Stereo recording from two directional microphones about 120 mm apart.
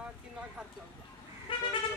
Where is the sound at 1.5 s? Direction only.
45° left (ahead or behind).